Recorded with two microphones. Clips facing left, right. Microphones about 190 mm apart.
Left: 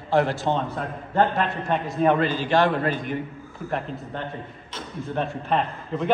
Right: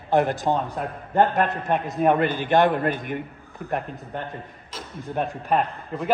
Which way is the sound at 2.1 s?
55° right (ahead or behind).